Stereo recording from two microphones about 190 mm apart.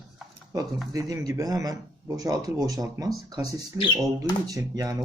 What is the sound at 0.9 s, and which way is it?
Speech, 20° right (ahead or behind).